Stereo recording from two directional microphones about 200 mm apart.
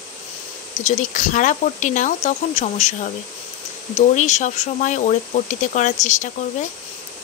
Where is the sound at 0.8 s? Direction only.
35° left (ahead or behind).